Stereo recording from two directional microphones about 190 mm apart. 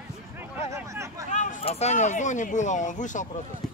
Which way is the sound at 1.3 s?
40° left (ahead or behind).